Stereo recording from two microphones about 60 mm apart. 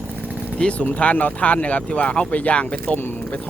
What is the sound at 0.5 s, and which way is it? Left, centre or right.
Speech, left.